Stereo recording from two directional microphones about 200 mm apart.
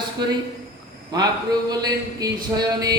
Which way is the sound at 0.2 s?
20° right (ahead or behind).